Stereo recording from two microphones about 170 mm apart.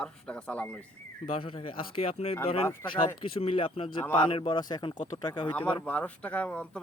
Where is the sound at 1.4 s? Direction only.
30° left (ahead or behind).